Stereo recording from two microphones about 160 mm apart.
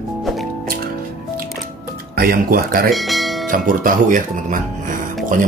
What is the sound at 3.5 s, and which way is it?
Speech, 55° right (ahead or behind).